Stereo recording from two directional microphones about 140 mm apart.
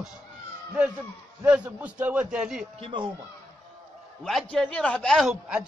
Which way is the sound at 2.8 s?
35° right (ahead or behind).